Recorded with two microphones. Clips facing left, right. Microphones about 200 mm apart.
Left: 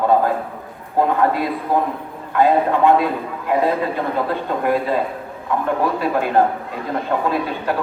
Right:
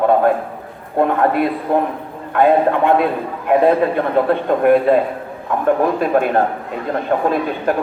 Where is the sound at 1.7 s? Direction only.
65° right (ahead or behind).